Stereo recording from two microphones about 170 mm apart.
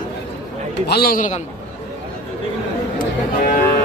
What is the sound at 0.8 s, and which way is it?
Speech, 65° left (ahead or behind).